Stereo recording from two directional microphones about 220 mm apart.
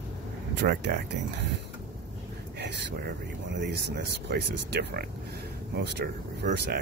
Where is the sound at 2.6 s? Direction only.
45° right (ahead or behind).